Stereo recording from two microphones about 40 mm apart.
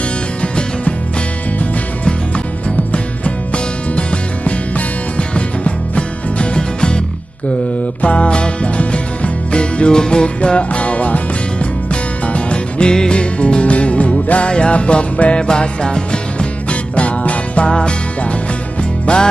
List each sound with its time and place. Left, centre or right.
0.4 s music: left
2.7 s music: left
8.0 s music: left
14.5 s music: left
17.6 s music: left